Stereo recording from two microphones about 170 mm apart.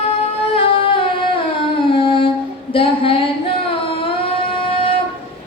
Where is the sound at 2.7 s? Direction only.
30° left (ahead or behind).